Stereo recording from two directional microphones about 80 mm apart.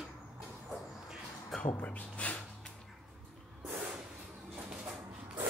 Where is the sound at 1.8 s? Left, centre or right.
Centre.